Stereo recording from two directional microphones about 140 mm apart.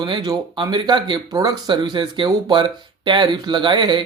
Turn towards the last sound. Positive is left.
turn(degrees=-35)  # may be behind; listen again after turning